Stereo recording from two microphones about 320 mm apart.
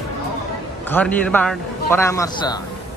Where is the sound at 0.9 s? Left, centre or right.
Centre.